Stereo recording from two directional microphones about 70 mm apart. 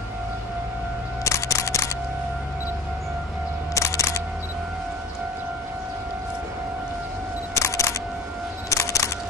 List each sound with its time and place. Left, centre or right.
1.2 s music: left
3.7 s camera: left
7.5 s single-lens reflex camera: left
8.6 s a sound: left